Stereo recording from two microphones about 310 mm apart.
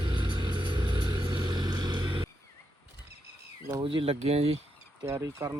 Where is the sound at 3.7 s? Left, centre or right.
Centre.